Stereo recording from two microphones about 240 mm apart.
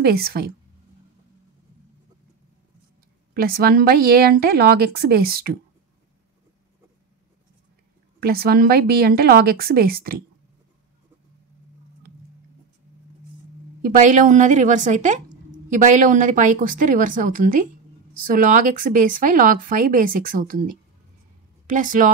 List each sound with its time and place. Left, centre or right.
0.0 s speech: right
3.3 s speech: right
8.2 s speech: right
13.8 s speech: right
21.6 s speech: right